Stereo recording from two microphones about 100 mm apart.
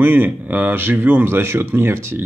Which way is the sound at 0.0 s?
20° right (ahead or behind).